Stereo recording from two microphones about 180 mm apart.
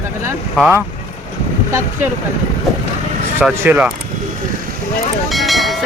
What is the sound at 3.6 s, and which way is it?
Speech, 10° right (ahead or behind).